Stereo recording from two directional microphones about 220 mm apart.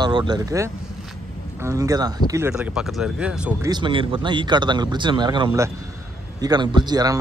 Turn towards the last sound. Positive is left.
turn(degrees=-20)  # may be behind; listen again after turning